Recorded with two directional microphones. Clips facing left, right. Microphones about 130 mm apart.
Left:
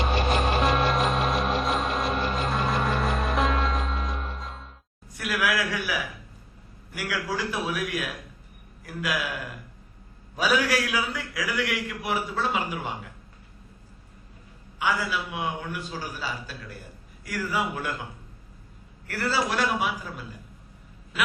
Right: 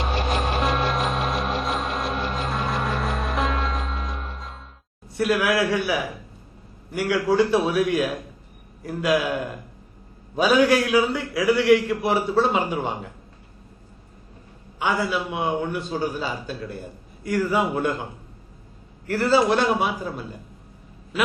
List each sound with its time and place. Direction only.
0.0 s music: centre (ahead or behind)
5.1 s a man's voice: 30° right (ahead or behind)
14.8 s a man's voice: 25° right (ahead or behind)
19.0 s a man's voice: 25° right (ahead or behind)